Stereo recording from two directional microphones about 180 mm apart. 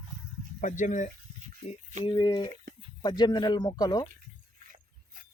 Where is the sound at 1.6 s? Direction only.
35° left (ahead or behind).